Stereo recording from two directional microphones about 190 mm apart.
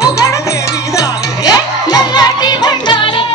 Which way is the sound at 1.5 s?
20° left (ahead or behind).